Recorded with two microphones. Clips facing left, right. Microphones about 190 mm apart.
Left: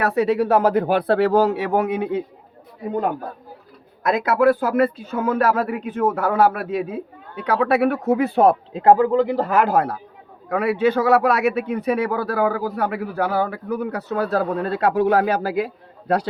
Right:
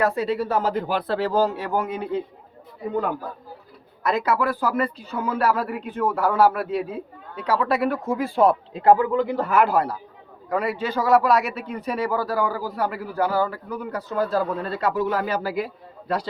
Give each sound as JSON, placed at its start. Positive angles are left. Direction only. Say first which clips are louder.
{"t": 0.0, "sound": "speech", "louder": "left 4 dB", "side_deg": 70}
{"t": 4.0, "sound": "a man's voice", "louder": "left 5 dB", "side_deg": 50}
{"t": 7.4, "sound": "speech", "louder": "left 4 dB", "side_deg": 65}
{"t": 8.8, "sound": "speech", "louder": "left 3 dB", "side_deg": 35}
{"t": 10.5, "sound": "speech", "louder": "left 6 dB", "side_deg": 60}